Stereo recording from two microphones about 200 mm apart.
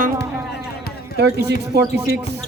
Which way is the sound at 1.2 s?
55° right (ahead or behind).